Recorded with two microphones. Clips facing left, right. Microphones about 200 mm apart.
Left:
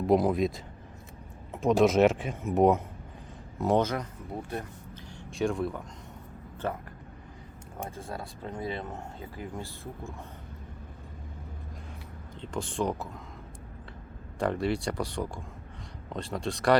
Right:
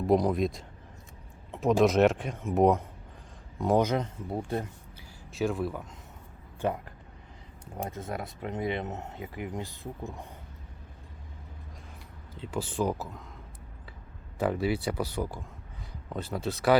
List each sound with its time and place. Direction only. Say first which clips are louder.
0.1 s speech: left 1 dB; centre (ahead or behind)
1.6 s speech: left 1 dB; centre (ahead or behind)
3.8 s speech: right 2 dB; 20° right (ahead or behind)
4.9 s a sound: even; 5° right (ahead or behind)
6.6 s speech: right 3 dB; 15° right (ahead or behind)
7.9 s speech: right 3 dB; 20° right (ahead or behind)
12.4 s speech: right 1 dB; 5° right (ahead or behind)
14.3 s speech: even; 5° right (ahead or behind)